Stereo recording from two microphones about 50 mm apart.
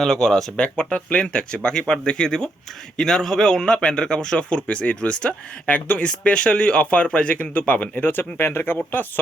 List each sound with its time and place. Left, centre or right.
0.0 s speech: centre
0.5 s speech: left